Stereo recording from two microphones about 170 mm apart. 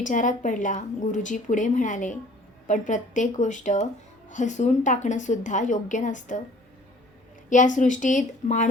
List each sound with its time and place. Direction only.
0.0 s a woman's voice: 50° left (ahead or behind)
7.5 s a woman's voice: 45° left (ahead or behind)